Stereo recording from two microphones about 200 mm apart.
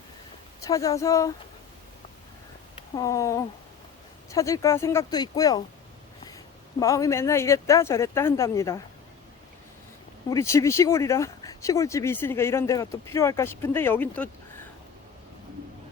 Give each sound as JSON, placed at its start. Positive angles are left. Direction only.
{"t": 0.6, "sound": "speech", "side_deg": 15}
{"t": 2.9, "sound": "speech", "side_deg": 20}
{"t": 6.7, "sound": "speech", "side_deg": 15}
{"t": 10.2, "sound": "speech", "side_deg": 15}